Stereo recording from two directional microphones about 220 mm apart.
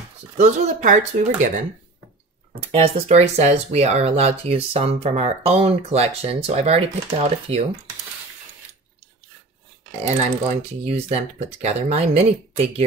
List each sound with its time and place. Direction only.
0.4 s speech: 35° right (ahead or behind)
10.0 s speech: 30° right (ahead or behind)